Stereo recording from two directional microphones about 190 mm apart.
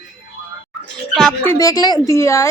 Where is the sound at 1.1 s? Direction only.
5° left (ahead or behind).